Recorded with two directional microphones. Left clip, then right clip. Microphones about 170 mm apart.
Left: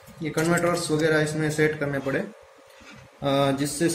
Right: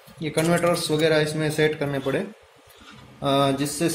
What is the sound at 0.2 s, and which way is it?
A man's voice, 30° right (ahead or behind).